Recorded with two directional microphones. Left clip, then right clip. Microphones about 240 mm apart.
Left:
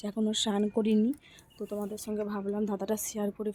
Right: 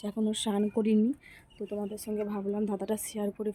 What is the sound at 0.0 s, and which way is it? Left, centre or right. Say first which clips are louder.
Speech: left 2 dB; centre.